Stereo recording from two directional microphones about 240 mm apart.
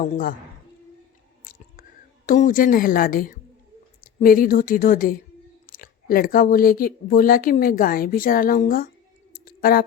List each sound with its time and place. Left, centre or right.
1.5 s chewing: left
2.2 s speech: left
9.3 s clicking: left